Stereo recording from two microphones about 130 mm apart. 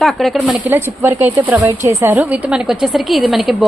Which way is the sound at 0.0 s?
Centre (ahead or behind).